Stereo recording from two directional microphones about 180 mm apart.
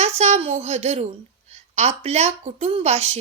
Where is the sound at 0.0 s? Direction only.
40° right (ahead or behind).